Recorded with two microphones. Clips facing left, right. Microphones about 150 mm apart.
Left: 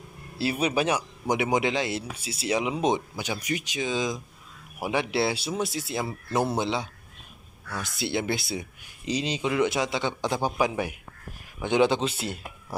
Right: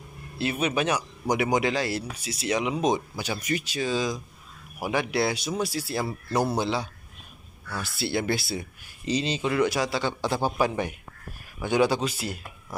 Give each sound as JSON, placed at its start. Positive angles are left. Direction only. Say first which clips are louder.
{"t": 0.4, "sound": "speech", "louder": "left 1 dB", "side_deg": 35}
{"t": 3.4, "sound": "speech", "louder": "right 3 dB", "side_deg": 15}
{"t": 11.6, "sound": "speech", "louder": "left 1 dB", "side_deg": 20}